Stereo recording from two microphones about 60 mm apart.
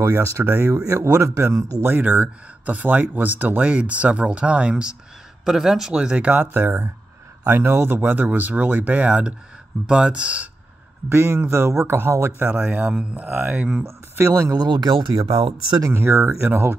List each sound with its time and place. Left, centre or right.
0.0 s a man's voice: right
1.9 s speech: right
5.4 s a man's voice: centre
6.1 s speech: right
7.4 s a man's voice: right
11.1 s speech: right
12.5 s speech: right
13.3 s speech: right
13.6 s speech: right
13.8 s speech: right
15.1 s speech: right
15.9 s speech: right